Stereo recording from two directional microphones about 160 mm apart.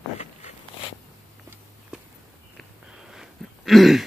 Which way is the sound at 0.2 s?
45° left (ahead or behind).